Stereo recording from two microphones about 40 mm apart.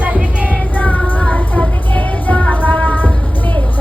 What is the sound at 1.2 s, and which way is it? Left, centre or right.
Music, left.